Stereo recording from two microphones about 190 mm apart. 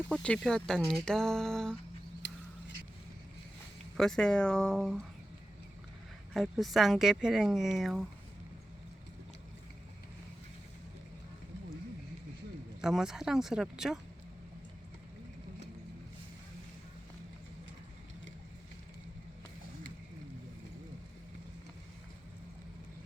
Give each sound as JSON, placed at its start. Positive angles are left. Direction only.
{"t": 0.1, "sound": "speech", "side_deg": 5}
{"t": 2.2, "sound": "a sound", "side_deg": 65}
{"t": 3.9, "sound": "speech", "side_deg": 0}
{"t": 6.3, "sound": "speech", "side_deg": 0}
{"t": 12.8, "sound": "speech", "side_deg": -5}